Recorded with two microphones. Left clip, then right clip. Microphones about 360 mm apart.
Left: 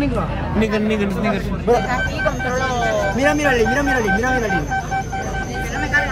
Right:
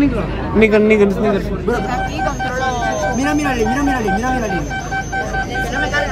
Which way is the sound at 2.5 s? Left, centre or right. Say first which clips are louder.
Right 1 dB; centre.